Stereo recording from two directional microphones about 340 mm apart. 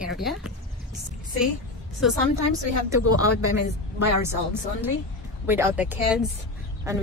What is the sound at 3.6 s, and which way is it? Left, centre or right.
Speech, left.